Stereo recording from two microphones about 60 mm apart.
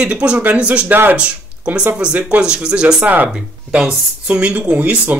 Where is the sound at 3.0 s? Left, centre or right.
Right.